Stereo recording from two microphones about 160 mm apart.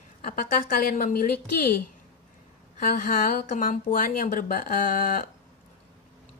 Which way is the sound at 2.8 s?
60° left (ahead or behind).